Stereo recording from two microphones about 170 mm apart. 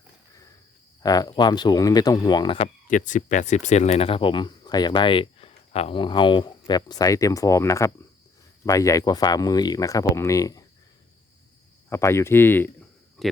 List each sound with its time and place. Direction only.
1.0 s speech: 20° left (ahead or behind)
2.8 s speech: 50° left (ahead or behind); by 10.6 s 20° left (ahead or behind)
11.9 s speech: 15° left (ahead or behind)
13.2 s speech: centre (ahead or behind)